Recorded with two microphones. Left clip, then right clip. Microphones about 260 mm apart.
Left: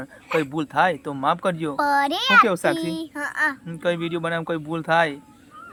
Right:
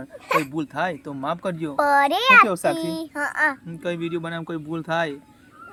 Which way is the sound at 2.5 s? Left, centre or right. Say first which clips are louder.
Left 1 dB; centre.